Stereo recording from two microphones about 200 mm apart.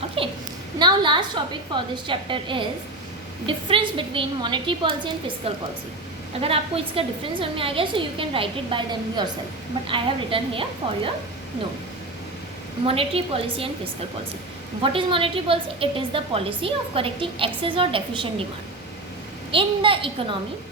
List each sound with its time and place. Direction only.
0.2 s a sound: 25° right (ahead or behind)
0.8 s a woman's voice: 25° right (ahead or behind)
12.8 s a woman's voice: 30° right (ahead or behind)
14.8 s a woman's voice: 25° right (ahead or behind)
19.5 s a woman's voice: 25° right (ahead or behind)